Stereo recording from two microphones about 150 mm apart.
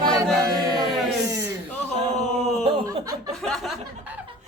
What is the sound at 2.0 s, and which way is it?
Speech, 45° right (ahead or behind).